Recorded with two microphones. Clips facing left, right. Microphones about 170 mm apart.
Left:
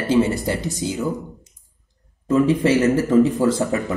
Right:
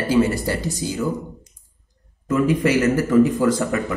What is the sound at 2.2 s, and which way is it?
Speech, 35° left (ahead or behind).